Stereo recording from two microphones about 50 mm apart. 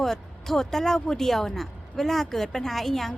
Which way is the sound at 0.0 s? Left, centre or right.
Centre.